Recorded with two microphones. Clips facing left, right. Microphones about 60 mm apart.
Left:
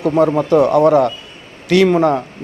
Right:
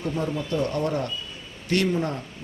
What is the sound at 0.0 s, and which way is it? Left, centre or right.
Speech, left.